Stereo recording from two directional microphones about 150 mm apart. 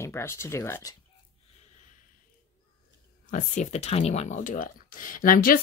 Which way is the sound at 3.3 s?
50° left (ahead or behind).